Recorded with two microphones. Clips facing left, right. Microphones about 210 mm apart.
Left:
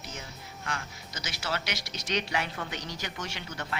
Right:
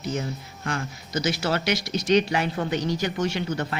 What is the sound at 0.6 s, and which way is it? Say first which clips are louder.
Speech: right 8 dB; 45° right (ahead or behind).